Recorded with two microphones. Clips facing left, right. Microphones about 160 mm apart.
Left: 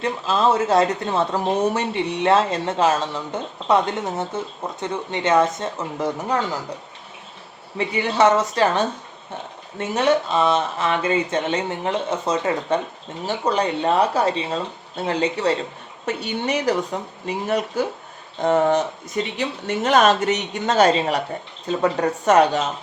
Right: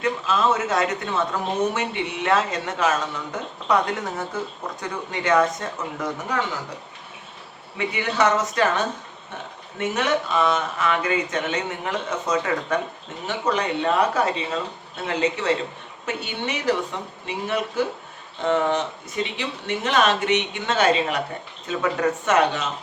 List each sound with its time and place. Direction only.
0.0 s speech: 30° left (ahead or behind)
7.9 s speech: 30° left (ahead or behind)
9.7 s speech: 30° left (ahead or behind)